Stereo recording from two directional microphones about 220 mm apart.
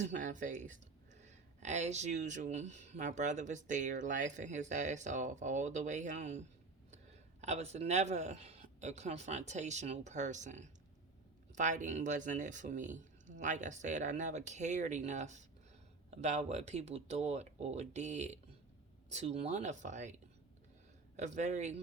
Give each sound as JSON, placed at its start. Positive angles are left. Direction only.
{"t": 0.0, "sound": "speech", "side_deg": -35}
{"t": 7.4, "sound": "speech", "side_deg": -30}
{"t": 21.2, "sound": "speech", "side_deg": -30}